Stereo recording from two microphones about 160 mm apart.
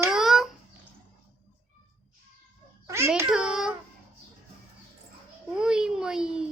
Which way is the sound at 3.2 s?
5° right (ahead or behind).